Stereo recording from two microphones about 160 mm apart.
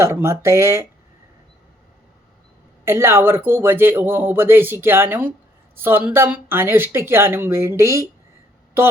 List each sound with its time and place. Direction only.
0.0 s speech: 15° right (ahead or behind)
2.8 s speech: 15° right (ahead or behind)